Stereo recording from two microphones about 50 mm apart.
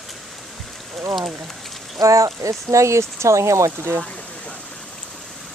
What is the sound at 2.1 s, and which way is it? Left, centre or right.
Speech, right.